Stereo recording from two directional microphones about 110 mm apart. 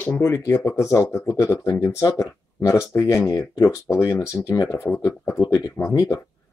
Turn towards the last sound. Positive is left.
turn(degrees=25)  # may be behind; listen again after turning